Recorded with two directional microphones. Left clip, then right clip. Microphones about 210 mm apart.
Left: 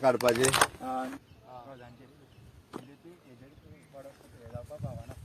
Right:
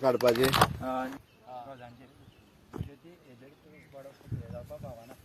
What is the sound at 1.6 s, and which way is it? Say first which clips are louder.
Bird: right 3 dB; 55° right (ahead or behind).